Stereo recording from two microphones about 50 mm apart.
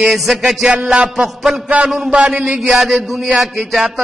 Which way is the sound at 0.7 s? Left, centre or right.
Centre.